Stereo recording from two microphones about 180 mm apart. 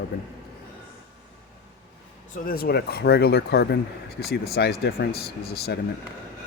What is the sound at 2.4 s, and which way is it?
Speech, 55° left (ahead or behind).